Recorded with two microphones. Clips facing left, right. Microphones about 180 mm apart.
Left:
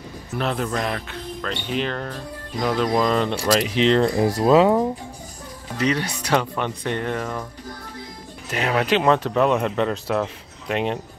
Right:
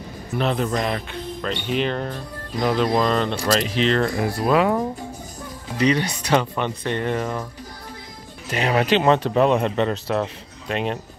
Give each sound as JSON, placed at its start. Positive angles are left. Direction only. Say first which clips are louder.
{"t": 0.4, "sound": "speech", "louder": "right 2 dB", "side_deg": 0}
{"t": 5.8, "sound": "speech", "louder": "right 3 dB", "side_deg": 5}
{"t": 8.5, "sound": "speech", "louder": "right 1 dB", "side_deg": 0}
{"t": 9.2, "sound": "speech", "louder": "right 1 dB", "side_deg": -30}
{"t": 9.8, "sound": "speech", "louder": "even", "side_deg": 5}
{"t": 10.7, "sound": "speech", "louder": "left 1 dB", "side_deg": 20}